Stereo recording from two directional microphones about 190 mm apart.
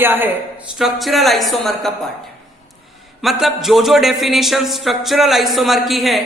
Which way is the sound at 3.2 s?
Centre (ahead or behind).